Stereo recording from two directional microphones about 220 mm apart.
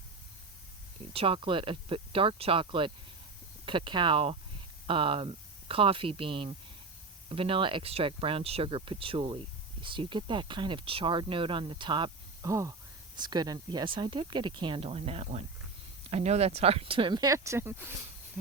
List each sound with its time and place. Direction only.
1.1 s speech: 25° right (ahead or behind)